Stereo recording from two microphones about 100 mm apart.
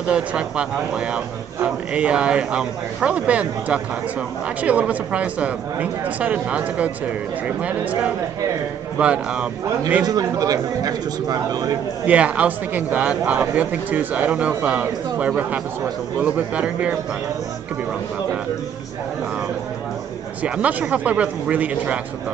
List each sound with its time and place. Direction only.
0.1 s a man's voice: 10° right (ahead or behind)
10.0 s speech: 40° right (ahead or behind)
12.1 s a man's voice: 15° right (ahead or behind)
20.4 s a man's voice: 10° right (ahead or behind)